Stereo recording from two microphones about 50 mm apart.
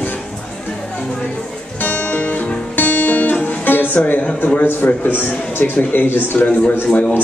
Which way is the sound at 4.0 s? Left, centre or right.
Left.